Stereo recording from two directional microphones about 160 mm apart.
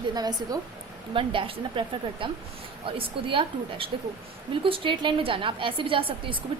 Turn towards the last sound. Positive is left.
turn(degrees=-35)  # may be behind; listen again after turning